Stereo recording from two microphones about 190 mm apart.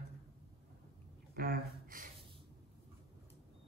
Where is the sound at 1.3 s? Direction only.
50° right (ahead or behind).